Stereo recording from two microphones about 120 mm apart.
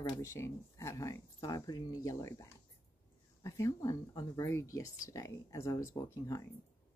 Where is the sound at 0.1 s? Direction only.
25° left (ahead or behind).